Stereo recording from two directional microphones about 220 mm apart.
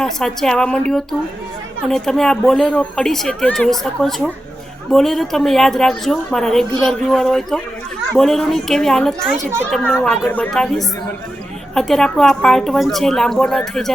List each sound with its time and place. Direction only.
0.0 s a woman's voice: centre (ahead or behind)
1.9 s a woman's voice: centre (ahead or behind)